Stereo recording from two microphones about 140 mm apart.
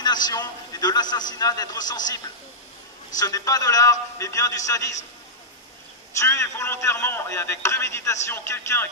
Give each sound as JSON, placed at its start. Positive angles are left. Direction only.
{"t": 0.0, "sound": "a man's voice", "side_deg": 30}
{"t": 6.1, "sound": "a man's voice", "side_deg": 20}